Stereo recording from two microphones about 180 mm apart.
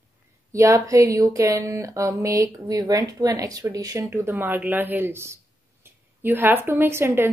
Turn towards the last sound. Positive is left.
turn(degrees=-15)  # may be behind; listen again after turning